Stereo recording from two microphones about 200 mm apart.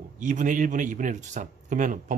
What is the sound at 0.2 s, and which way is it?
A man's voice, 40° right (ahead or behind).